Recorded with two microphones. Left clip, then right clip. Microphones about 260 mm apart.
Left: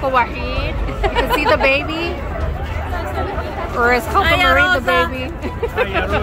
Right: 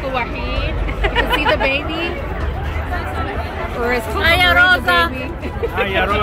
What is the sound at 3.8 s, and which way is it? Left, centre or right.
Speech, centre.